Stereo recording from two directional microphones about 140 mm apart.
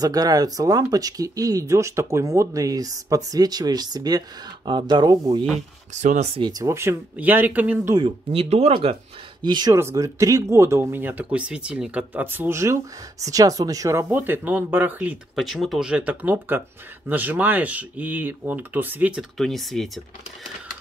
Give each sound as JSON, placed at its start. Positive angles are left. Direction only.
{"t": 0.0, "sound": "speech", "side_deg": -25}
{"t": 5.9, "sound": "speech", "side_deg": -55}
{"t": 6.4, "sound": "speech", "side_deg": -20}
{"t": 7.9, "sound": "speech", "side_deg": -40}
{"t": 9.4, "sound": "speech", "side_deg": -30}
{"t": 9.8, "sound": "speech", "side_deg": -20}
{"t": 19.3, "sound": "speech", "side_deg": 0}